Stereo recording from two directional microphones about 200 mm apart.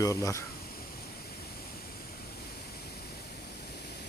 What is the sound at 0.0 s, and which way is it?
Speech, 15° left (ahead or behind).